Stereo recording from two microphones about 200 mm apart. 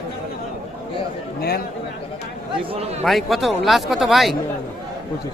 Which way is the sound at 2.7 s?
30° right (ahead or behind).